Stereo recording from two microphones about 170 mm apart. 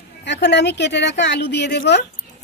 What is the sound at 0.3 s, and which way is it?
Speech, 90° left.